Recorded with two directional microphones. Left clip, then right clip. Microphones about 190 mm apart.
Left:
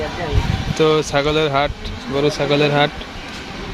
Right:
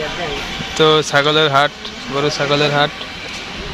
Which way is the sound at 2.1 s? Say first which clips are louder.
Right 1 dB; 15° left (ahead or behind).